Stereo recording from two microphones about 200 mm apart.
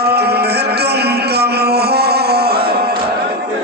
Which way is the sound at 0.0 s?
55° right (ahead or behind).